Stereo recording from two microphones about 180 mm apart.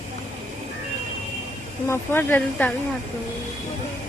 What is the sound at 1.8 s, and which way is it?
Speech, 15° left (ahead or behind).